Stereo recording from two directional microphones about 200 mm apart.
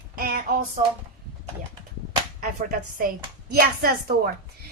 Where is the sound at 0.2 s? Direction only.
45° right (ahead or behind).